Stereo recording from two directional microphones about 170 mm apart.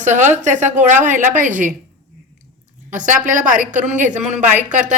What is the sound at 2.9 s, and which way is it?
A woman's voice, 50° right (ahead or behind).